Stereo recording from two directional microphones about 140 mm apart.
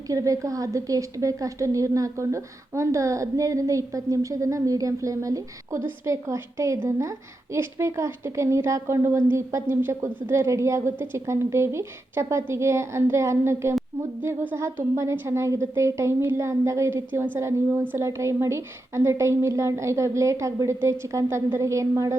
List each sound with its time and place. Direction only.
0.1 s a woman's voice: 25° right (ahead or behind)